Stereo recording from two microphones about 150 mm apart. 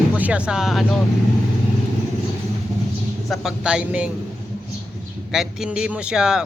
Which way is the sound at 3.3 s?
5° right (ahead or behind).